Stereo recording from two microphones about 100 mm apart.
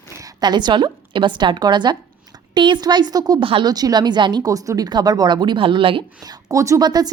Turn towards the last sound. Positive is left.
turn(degrees=-40)  # may be behind; listen again after turning